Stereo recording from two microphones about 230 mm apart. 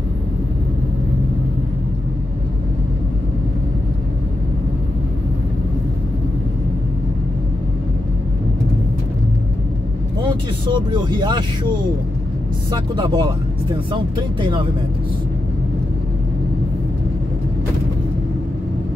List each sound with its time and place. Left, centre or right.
10.7 s speech: centre
12.7 s speech: centre